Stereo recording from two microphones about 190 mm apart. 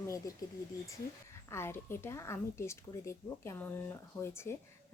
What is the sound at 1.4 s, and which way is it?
A woman's voice, 15° left (ahead or behind).